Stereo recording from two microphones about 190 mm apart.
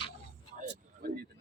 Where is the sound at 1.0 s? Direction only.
50° right (ahead or behind).